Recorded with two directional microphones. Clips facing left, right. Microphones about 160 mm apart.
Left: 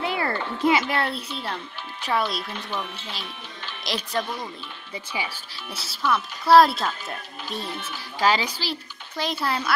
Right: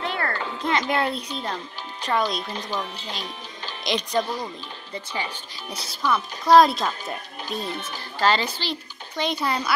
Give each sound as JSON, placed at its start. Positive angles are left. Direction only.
{"t": 0.0, "sound": "a sound", "side_deg": 5}
{"t": 0.7, "sound": "speech", "side_deg": 5}
{"t": 2.5, "sound": "speech", "side_deg": -35}
{"t": 3.8, "sound": "speech", "side_deg": 0}
{"t": 8.0, "sound": "a child's voice", "side_deg": 10}